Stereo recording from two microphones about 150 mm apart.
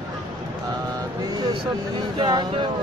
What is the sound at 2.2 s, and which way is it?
Speech, 30° right (ahead or behind).